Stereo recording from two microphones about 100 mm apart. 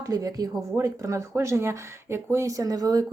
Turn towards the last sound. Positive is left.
turn(degrees=-40)  # may be behind; listen again after turning